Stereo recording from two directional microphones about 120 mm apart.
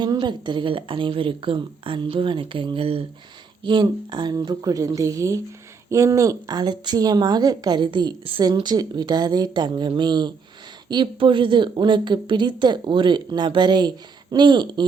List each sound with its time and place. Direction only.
0.0 s speech: 40° right (ahead or behind)
3.6 s a woman's voice: 40° right (ahead or behind)